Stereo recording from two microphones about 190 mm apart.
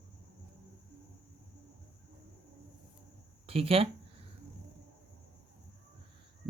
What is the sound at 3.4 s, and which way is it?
Speech, 30° right (ahead or behind).